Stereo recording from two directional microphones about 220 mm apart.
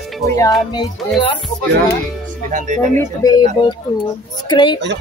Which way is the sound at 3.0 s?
15° left (ahead or behind).